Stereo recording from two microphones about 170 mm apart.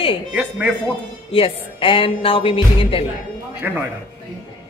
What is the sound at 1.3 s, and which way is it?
A woman's voice, 30° left (ahead or behind).